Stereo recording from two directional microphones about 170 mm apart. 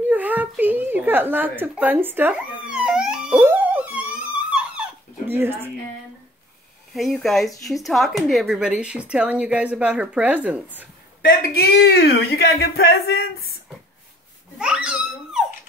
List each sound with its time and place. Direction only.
0.1 s a sound: 10° right (ahead or behind)
6.9 s speech: centre (ahead or behind)
11.2 s speech: 70° left (ahead or behind)
14.6 s speech: 5° right (ahead or behind)